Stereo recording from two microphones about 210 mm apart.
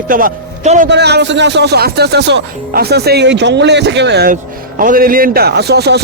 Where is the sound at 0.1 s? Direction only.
40° right (ahead or behind).